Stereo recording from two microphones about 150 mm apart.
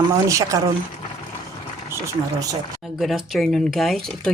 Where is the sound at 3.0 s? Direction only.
Centre (ahead or behind).